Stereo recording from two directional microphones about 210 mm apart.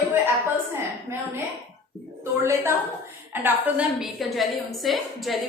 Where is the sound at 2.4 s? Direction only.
15° right (ahead or behind).